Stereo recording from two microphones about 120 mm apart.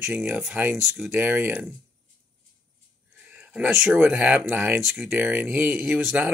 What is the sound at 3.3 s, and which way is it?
Speech, 15° right (ahead or behind).